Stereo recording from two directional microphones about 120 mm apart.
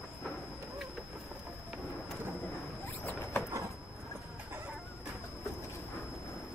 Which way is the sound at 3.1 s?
20° left (ahead or behind).